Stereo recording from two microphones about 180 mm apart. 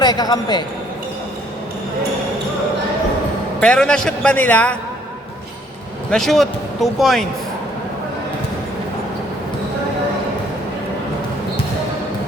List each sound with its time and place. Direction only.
0.0 s a man's voice: 20° left (ahead or behind)
3.6 s a man's voice: 5° left (ahead or behind)
6.1 s a man's voice: centre (ahead or behind)